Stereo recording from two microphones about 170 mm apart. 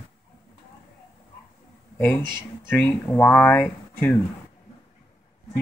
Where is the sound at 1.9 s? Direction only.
10° left (ahead or behind).